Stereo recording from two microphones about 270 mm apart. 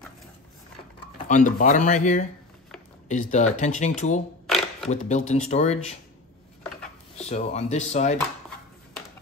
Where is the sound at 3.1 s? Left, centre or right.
Left.